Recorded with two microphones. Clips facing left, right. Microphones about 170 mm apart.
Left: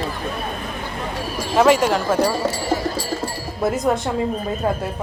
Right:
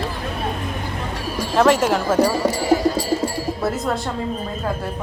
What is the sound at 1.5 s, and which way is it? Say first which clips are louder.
Speech: left 1 dB; centre (ahead or behind).